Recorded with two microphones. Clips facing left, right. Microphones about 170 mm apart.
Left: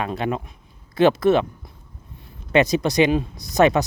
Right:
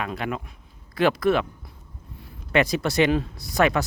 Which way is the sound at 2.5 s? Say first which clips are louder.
Left 4 dB; 20° left (ahead or behind).